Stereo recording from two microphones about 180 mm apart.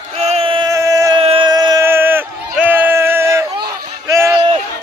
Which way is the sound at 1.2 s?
30° right (ahead or behind).